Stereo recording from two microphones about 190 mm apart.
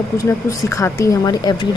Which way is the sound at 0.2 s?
15° left (ahead or behind).